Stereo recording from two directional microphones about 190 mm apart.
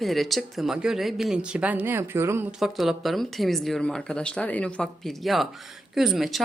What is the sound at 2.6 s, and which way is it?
Speech, centre (ahead or behind).